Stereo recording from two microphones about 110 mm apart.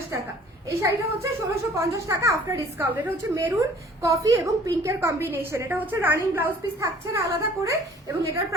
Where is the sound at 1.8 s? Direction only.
25° right (ahead or behind).